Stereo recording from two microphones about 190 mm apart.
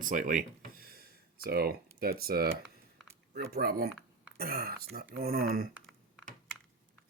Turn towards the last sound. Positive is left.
turn(degrees=0)  # may be behind; listen again after turning